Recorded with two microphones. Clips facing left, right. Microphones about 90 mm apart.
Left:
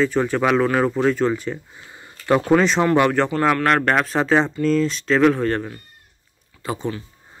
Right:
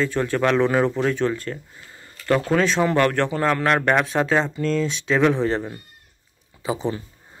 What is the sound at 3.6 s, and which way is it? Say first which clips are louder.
Speech: left 1 dB; centre (ahead or behind).